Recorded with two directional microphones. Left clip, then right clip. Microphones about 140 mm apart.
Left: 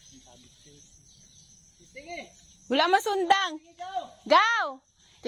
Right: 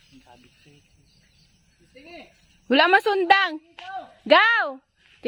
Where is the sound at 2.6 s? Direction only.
90° right.